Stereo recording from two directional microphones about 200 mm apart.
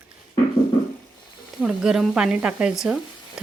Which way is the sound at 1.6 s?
Centre (ahead or behind).